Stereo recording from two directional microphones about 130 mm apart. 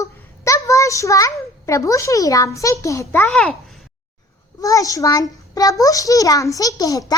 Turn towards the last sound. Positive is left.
turn(degrees=25)  # may be behind; listen again after turning